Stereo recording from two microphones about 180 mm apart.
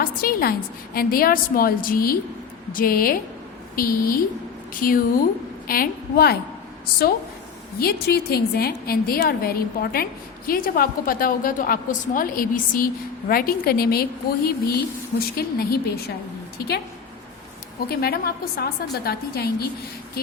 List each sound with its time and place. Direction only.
0.0 s a woman's voice: 55° left (ahead or behind)
7.8 s a woman's voice: 60° left (ahead or behind)
17.8 s a woman's voice: 60° left (ahead or behind)